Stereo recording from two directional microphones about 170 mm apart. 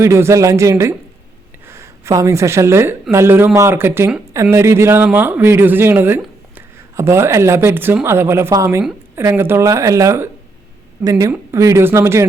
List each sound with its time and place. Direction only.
0.0 s speech: 15° right (ahead or behind)